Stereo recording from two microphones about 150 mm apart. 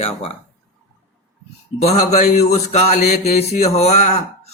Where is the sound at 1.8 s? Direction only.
45° left (ahead or behind).